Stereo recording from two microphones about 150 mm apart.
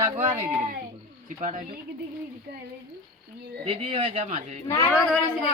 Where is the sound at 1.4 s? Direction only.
55° right (ahead or behind).